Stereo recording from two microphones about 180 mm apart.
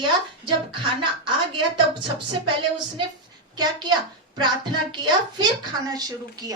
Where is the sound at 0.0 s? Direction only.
25° right (ahead or behind).